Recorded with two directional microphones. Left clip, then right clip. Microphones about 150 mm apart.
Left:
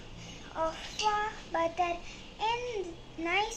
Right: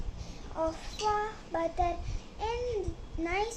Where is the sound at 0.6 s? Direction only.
70° right (ahead or behind).